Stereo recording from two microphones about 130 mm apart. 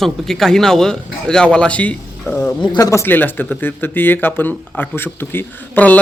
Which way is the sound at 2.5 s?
35° left (ahead or behind).